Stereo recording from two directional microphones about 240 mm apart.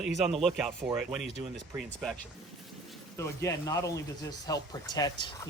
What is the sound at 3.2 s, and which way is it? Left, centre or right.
Speech, centre.